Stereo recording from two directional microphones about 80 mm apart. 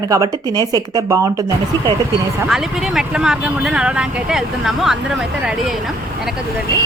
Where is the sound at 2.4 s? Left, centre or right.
Centre.